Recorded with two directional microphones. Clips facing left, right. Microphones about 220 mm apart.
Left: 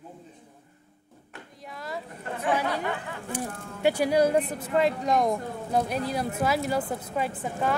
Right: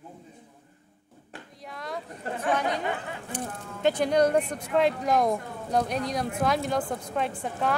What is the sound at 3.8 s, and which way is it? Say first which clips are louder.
A woman's voice: even; 10° left (ahead or behind).